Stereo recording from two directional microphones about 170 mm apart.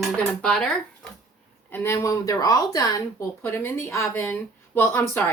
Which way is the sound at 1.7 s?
15° left (ahead or behind).